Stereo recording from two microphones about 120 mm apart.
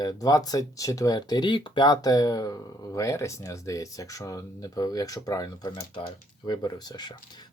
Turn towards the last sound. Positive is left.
turn(degrees=35)  # may be behind; listen again after turning